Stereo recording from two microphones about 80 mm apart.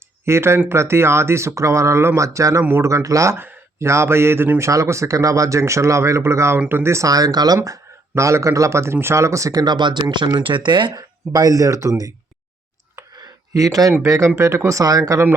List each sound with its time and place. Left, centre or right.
0.3 s speech: right
3.3 s speech: right
7.1 s speech: right
10.9 s speech: right
13.1 s a sound: right
14.0 s speech: right